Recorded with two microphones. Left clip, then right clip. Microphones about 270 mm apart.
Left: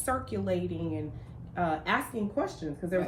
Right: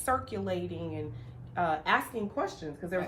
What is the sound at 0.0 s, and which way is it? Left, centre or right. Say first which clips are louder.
Speech: right 1 dB; centre.